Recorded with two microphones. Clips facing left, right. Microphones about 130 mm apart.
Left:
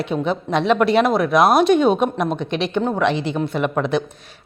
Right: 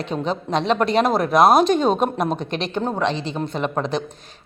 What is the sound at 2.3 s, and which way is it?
A woman's voice, 40° right (ahead or behind).